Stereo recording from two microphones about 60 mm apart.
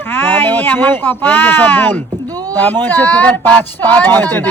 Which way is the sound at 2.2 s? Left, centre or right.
Right.